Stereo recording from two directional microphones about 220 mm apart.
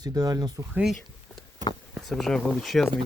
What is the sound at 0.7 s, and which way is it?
Speech, centre (ahead or behind).